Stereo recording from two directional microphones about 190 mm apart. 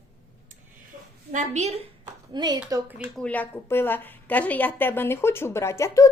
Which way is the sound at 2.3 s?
20° right (ahead or behind).